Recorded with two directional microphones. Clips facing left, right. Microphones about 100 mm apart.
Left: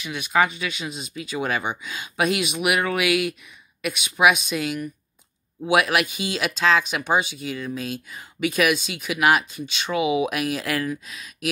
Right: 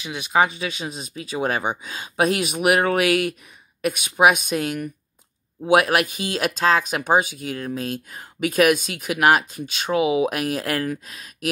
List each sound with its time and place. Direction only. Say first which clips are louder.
0.0 s speech: right 1 dB; 25° right (ahead or behind)